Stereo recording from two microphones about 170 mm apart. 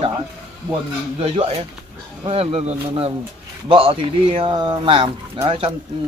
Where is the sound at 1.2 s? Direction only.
35° right (ahead or behind).